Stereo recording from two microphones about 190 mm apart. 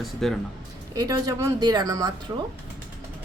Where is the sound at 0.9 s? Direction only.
20° right (ahead or behind).